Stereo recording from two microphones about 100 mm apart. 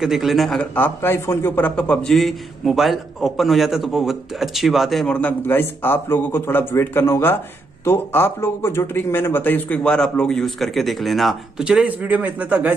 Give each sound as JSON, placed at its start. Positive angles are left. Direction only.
{"t": 0.0, "sound": "speech", "side_deg": -5}
{"t": 0.6, "sound": "speech", "side_deg": 20}
{"t": 5.0, "sound": "a man's voice", "side_deg": 15}